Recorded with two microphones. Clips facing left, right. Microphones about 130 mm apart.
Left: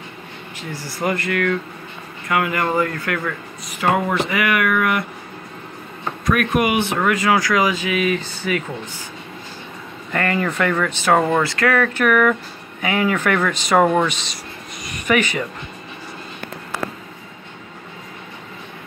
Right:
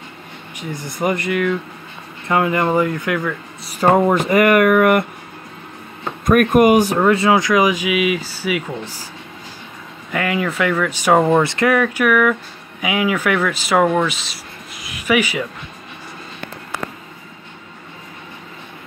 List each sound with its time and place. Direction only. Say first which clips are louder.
0.6 s speech: right 3 dB; 20° right (ahead or behind)
2.2 s speech: right 3 dB; 25° right (ahead or behind)
3.6 s speech: right 6 dB; 35° right (ahead or behind)
6.2 s speech: right 7 dB; 45° right (ahead or behind)
7.0 s speech: right 4 dB; 25° right (ahead or behind); by 8.6 s 10° right (ahead or behind)
10.1 s speech: right 1 dB; 5° right (ahead or behind)
11.4 s speech: right 2 dB; 20° right (ahead or behind)
11.8 s speech: right 1 dB; 10° right (ahead or behind)